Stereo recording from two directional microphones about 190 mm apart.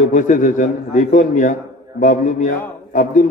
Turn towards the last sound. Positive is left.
turn(degrees=45)  # may be behind; listen again after turning